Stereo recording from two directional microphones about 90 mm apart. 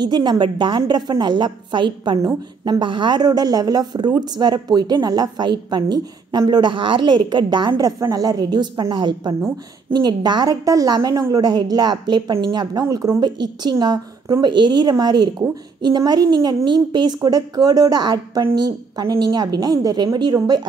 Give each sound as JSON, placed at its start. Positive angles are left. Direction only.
{"t": 0.0, "sound": "a woman's voice", "side_deg": -50}
{"t": 6.5, "sound": "a woman's voice", "side_deg": -60}